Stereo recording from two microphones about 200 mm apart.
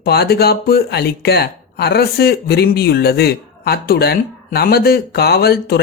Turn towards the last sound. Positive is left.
turn(degrees=50)  # may be behind; listen again after turning